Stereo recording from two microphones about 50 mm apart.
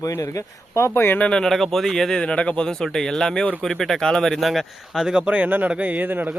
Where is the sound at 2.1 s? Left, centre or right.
Left; by 4.6 s centre.